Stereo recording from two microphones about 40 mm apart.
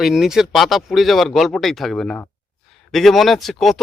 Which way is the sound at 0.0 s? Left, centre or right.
Centre.